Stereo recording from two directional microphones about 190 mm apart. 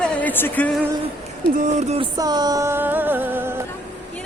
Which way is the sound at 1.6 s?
35° right (ahead or behind).